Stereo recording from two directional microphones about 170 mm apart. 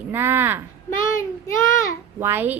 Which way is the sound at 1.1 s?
15° left (ahead or behind).